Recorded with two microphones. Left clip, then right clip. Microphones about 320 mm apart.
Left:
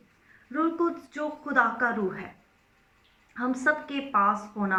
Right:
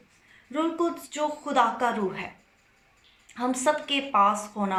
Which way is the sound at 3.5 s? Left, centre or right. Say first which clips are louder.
Right 2 dB; centre.